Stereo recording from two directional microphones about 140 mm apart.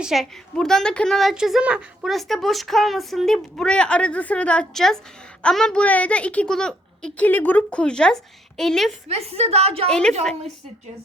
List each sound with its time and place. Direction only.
0.0 s a woman's voice: centre (ahead or behind)
9.0 s a woman's voice: 45° right (ahead or behind)
9.9 s a woman's voice: 5° left (ahead or behind)